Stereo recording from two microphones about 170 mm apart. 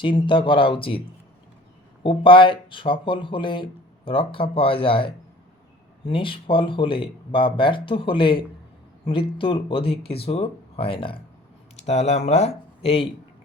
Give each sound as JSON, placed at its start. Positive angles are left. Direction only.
{"t": 0.0, "sound": "speech", "side_deg": 30}
{"t": 2.0, "sound": "speech", "side_deg": 30}